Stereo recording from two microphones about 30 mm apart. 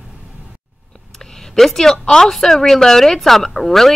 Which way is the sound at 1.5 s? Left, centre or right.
Centre.